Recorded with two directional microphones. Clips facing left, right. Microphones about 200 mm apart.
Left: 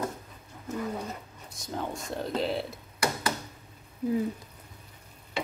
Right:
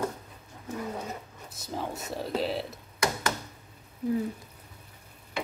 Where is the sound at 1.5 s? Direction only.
5° right (ahead or behind).